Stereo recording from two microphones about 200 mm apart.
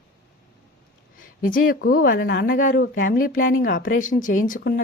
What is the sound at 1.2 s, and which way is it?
Speech, 45° left (ahead or behind).